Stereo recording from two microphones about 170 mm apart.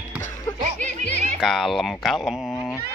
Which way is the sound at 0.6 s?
50° right (ahead or behind).